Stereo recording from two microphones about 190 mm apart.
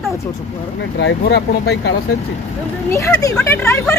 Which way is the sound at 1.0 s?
65° left (ahead or behind).